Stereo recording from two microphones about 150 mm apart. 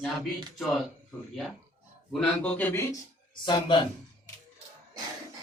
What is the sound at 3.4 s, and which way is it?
Speech, 30° left (ahead or behind).